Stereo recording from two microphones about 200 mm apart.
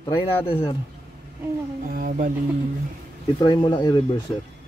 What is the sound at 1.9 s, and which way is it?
Speech, 45° right (ahead or behind).